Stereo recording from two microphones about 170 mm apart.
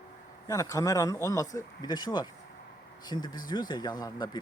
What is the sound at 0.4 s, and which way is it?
Speech, 20° left (ahead or behind).